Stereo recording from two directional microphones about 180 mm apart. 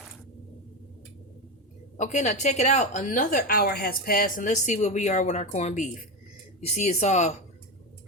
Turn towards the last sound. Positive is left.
turn(degrees=40)  # may be behind; listen again after turning